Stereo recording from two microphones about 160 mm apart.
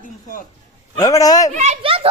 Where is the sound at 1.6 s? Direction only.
40° right (ahead or behind).